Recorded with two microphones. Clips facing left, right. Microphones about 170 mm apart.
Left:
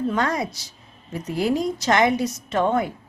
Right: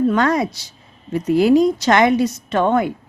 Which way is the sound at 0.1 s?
80° right.